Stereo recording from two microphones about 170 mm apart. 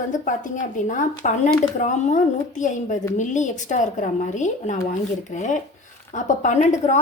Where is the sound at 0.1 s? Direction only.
50° left (ahead or behind).